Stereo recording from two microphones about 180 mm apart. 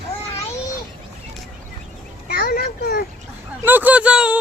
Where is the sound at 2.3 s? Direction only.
55° left (ahead or behind).